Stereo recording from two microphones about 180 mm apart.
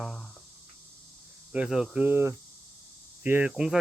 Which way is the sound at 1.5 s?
5° right (ahead or behind).